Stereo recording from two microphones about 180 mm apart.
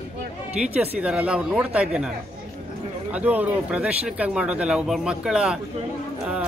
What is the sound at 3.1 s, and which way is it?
A man's voice, 10° right (ahead or behind).